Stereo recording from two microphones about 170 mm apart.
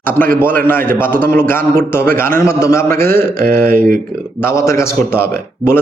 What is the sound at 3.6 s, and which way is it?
Speech, 60° right (ahead or behind).